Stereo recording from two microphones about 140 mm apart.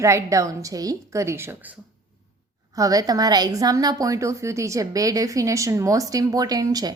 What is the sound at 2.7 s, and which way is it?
A woman's voice, 25° right (ahead or behind).